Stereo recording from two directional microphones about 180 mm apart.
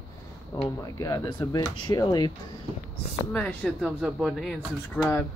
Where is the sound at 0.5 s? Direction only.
20° left (ahead or behind).